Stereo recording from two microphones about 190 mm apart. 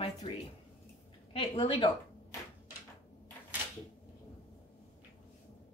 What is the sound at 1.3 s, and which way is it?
Speech, 30° left (ahead or behind).